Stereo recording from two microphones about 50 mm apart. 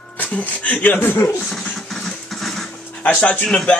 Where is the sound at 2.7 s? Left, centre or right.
Left.